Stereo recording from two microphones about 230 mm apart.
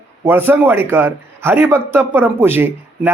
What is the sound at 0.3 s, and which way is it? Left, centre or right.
Speech, centre.